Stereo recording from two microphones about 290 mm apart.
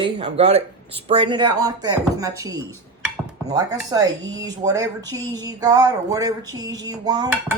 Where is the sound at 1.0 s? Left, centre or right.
Centre.